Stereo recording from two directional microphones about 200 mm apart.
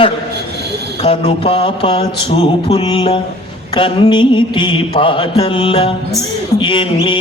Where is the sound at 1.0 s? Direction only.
30° left (ahead or behind).